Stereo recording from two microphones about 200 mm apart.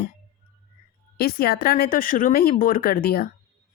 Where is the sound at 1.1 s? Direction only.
50° left (ahead or behind).